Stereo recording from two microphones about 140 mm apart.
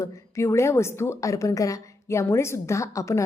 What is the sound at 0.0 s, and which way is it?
A woman's voice, 20° left (ahead or behind).